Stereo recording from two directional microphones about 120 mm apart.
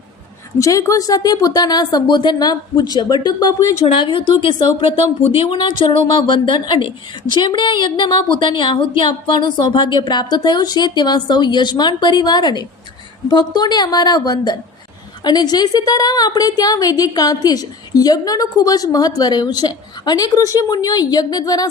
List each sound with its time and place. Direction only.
0.6 s a woman's voice: 25° left (ahead or behind)
3.8 s a woman's voice: 45° left (ahead or behind)